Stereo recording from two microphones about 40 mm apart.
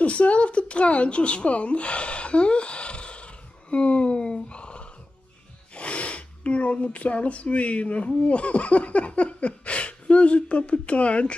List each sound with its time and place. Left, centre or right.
0.0 s a woman's voice: left